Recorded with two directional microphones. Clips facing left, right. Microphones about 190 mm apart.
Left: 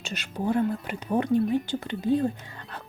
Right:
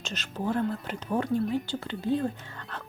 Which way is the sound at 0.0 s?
10° left (ahead or behind).